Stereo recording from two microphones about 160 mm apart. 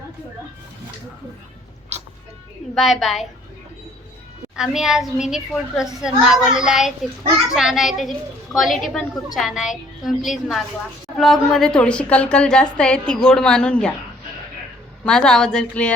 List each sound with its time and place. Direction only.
1.9 s cat: 45° right (ahead or behind)
2.7 s a woman's voice: centre (ahead or behind)
4.5 s a woman's voice: 5° right (ahead or behind)
15.0 s a woman's voice: 5° left (ahead or behind)